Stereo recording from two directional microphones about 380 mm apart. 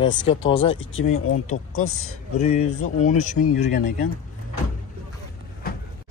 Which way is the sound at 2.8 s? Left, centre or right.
Centre.